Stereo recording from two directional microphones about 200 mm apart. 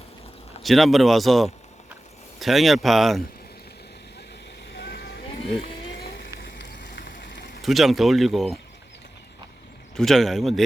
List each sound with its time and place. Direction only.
0.6 s speech: centre (ahead or behind)
4.7 s vehicle: 55° left (ahead or behind)
6.4 s frying: 50° left (ahead or behind)
6.8 s a sound: 45° left (ahead or behind)
7.2 s a sound: 60° left (ahead or behind)
7.6 s speech: centre (ahead or behind)
9.9 s speech: centre (ahead or behind)